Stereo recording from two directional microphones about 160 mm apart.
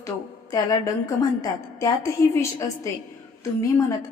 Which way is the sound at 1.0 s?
20° left (ahead or behind).